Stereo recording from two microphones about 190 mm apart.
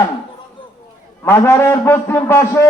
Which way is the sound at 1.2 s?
15° left (ahead or behind).